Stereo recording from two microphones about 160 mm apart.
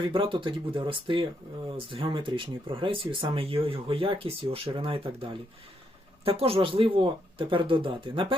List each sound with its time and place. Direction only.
0.1 s speech: 35° right (ahead or behind)